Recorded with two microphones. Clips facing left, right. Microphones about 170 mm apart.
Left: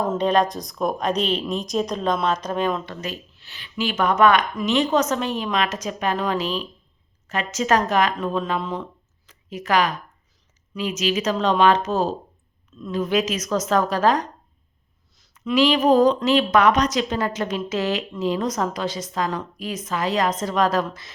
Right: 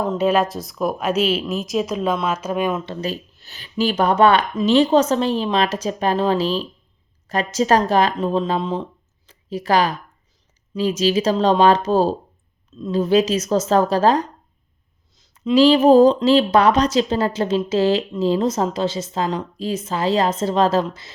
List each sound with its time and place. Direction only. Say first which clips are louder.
0.2 s speech: right 3 dB; 5° right (ahead or behind)
2.8 s a woman's voice: right 6 dB; 30° right (ahead or behind)